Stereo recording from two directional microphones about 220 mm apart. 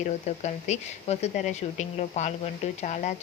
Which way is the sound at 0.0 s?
30° left (ahead or behind).